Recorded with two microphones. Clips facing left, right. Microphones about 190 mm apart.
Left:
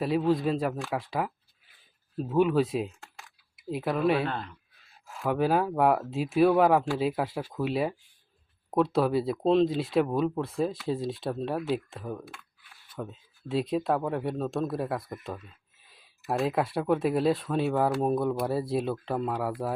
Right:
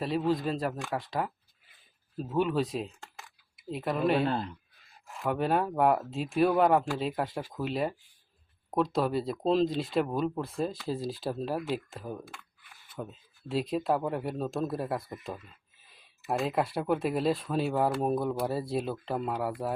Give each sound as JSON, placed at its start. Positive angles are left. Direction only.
{"t": 0.0, "sound": "speech", "side_deg": 5}
{"t": 4.3, "sound": "speech", "side_deg": -35}
{"t": 5.0, "sound": "speech", "side_deg": 0}